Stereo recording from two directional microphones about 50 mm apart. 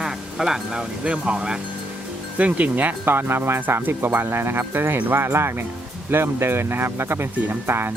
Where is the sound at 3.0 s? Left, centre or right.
Right.